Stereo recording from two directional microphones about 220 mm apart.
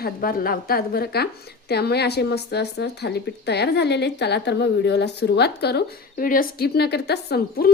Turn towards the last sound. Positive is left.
turn(degrees=45)  # may be behind; listen again after turning